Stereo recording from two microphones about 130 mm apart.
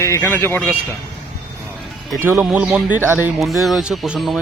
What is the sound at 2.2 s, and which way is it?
Speech, 15° right (ahead or behind).